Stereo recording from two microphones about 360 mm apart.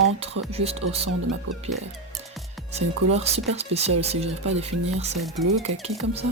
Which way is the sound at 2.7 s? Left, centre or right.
Centre.